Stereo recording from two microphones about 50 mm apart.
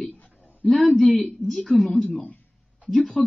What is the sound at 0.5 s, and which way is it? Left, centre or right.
Speech, left.